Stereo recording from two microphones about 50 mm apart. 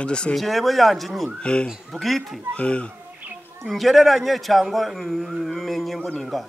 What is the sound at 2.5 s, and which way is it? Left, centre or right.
Speech, left.